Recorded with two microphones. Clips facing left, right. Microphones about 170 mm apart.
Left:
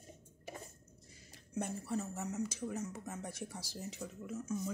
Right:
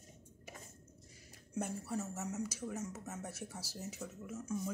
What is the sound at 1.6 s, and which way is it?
Speech, 5° right (ahead or behind).